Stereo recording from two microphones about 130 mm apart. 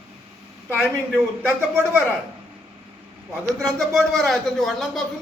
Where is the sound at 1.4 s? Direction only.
15° right (ahead or behind).